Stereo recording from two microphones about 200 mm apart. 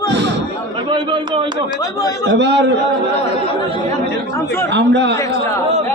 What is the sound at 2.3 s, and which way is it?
Speech, 60° right (ahead or behind).